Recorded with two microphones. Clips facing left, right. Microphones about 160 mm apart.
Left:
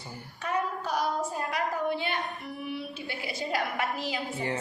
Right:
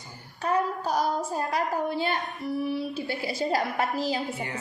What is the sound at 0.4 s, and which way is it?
Speech, 40° right (ahead or behind).